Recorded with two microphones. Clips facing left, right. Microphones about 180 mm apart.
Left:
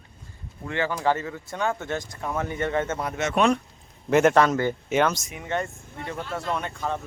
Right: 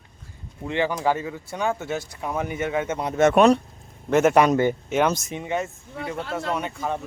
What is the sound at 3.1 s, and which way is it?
Speech, 50° right (ahead or behind).